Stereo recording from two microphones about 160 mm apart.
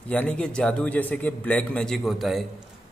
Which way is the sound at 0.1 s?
5° left (ahead or behind).